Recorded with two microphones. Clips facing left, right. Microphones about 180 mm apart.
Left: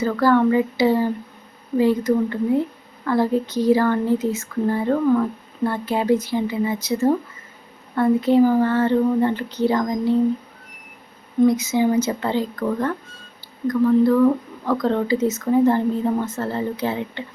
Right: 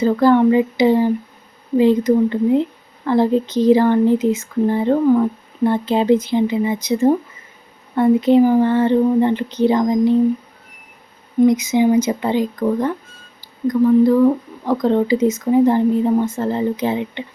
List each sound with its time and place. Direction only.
0.0 s a woman's voice: 20° right (ahead or behind)
11.4 s speech: 15° right (ahead or behind)